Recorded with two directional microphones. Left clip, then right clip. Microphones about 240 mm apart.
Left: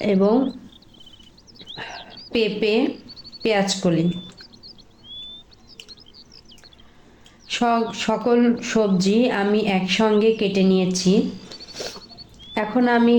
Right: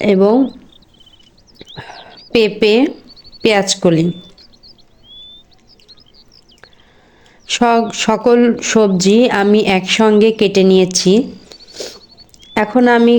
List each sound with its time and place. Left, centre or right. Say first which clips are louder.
0.0 s speech: right 8 dB; right
2.0 s a sound: right 3 dB; centre
2.3 s speech: right 9 dB; right
5.9 s chirp: right 1 dB; centre
7.4 s speech: right 8 dB; right
10.9 s a sound: right 8 dB; right
12.4 s speech: right 9 dB; right